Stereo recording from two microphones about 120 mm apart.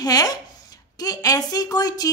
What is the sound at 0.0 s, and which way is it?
Speech, 30° left (ahead or behind).